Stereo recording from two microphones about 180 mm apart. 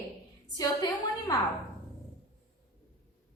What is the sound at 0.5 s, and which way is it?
Speech, 20° left (ahead or behind).